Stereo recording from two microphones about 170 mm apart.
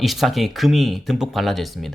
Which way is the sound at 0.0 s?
Centre (ahead or behind).